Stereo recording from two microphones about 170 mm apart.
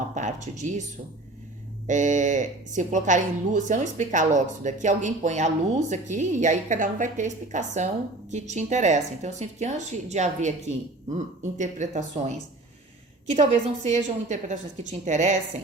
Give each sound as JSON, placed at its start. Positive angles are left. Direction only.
{"t": 0.1, "sound": "speech", "side_deg": -45}
{"t": 1.9, "sound": "speech", "side_deg": -45}